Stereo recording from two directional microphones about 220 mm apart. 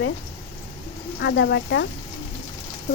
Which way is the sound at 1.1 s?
50° left (ahead or behind).